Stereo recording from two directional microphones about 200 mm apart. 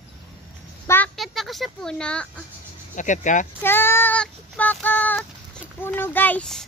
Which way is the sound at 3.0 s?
40° left (ahead or behind).